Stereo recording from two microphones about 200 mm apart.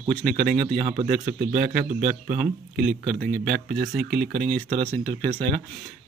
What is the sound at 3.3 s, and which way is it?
Speech, 50° right (ahead or behind).